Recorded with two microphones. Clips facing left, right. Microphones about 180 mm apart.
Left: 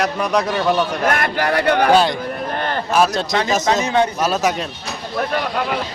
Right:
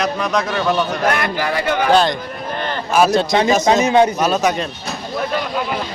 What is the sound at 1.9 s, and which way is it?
Speech, 10° left (ahead or behind).